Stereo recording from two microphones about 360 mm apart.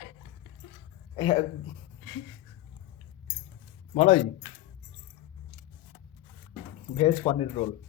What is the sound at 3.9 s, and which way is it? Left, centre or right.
Speech, centre.